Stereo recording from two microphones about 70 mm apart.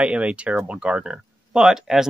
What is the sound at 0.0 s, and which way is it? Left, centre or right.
Speech, centre.